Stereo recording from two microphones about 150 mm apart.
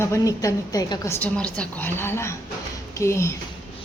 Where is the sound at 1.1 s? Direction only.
10° left (ahead or behind).